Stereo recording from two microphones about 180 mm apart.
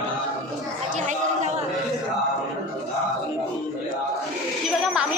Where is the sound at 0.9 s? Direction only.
40° right (ahead or behind).